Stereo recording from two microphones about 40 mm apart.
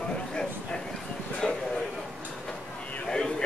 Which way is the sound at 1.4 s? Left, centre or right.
Centre.